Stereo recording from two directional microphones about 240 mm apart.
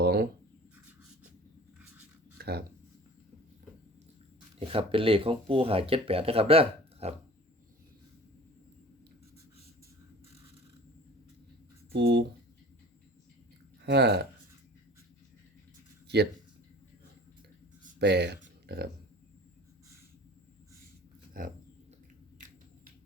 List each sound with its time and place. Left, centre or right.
0.0 s writing: right
2.4 s speech: right
4.6 s speech: right
11.9 s speech: right
13.8 s speech: right
18.0 s speech: right
21.4 s speech: right